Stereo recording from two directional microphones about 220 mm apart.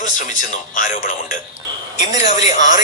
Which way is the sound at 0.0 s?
35° left (ahead or behind).